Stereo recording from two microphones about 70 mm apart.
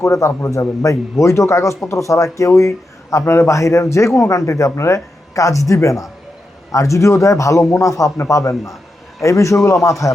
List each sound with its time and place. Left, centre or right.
0.0 s speech: left